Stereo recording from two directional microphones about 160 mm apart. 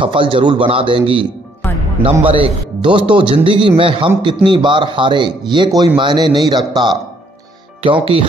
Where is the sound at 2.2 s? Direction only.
35° right (ahead or behind).